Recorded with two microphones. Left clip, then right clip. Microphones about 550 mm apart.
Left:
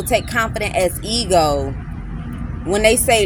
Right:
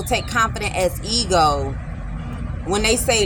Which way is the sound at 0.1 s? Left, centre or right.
Left.